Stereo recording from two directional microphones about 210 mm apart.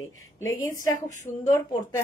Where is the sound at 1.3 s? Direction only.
15° left (ahead or behind).